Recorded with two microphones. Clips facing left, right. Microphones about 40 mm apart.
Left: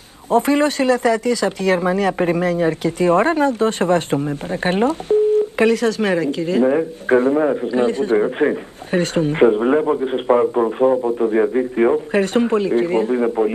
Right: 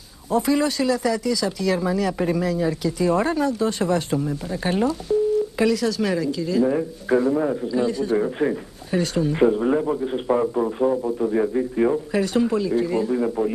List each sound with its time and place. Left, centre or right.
0.3 s speech: left